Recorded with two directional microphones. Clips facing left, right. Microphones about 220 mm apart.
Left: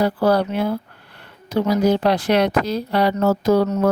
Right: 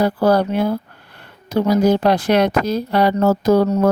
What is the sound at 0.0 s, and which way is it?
Speech, 45° right (ahead or behind).